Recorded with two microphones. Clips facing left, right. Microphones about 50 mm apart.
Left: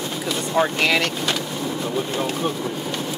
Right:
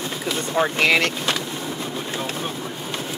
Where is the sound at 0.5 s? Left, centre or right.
Centre.